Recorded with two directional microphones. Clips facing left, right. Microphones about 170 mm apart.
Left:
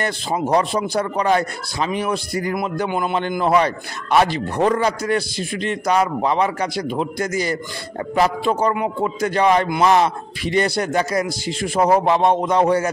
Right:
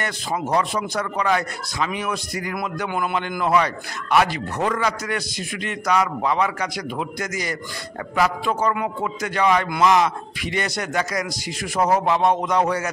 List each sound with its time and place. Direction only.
0.0 s a man's voice: 30° left (ahead or behind)